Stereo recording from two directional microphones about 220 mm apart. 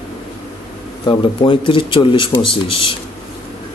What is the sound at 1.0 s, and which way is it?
Speech, 20° left (ahead or behind).